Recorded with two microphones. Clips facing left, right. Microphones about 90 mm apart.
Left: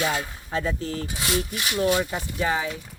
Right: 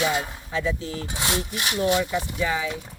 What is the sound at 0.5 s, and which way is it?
Speech, 40° left (ahead or behind).